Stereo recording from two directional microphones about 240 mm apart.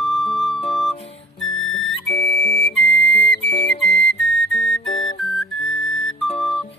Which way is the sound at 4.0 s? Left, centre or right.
Centre.